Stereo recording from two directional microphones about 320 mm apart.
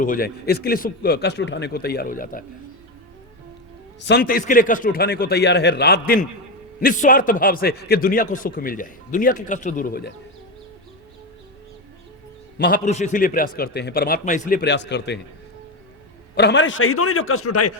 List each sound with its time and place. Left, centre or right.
0.0 s a man's voice: left
4.0 s a man's voice: left
12.5 s a man's voice: left
16.3 s a man's voice: left